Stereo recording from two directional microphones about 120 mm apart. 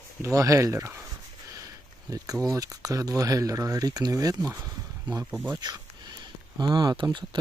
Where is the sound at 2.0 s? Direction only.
30° right (ahead or behind).